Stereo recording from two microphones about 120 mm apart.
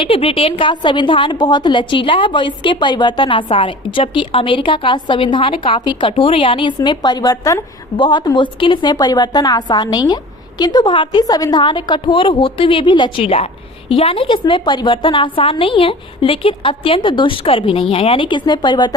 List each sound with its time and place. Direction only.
0.0 s a woman's voice: 50° left (ahead or behind); by 7.6 s 30° left (ahead or behind)
7.9 s a woman's voice: 40° left (ahead or behind)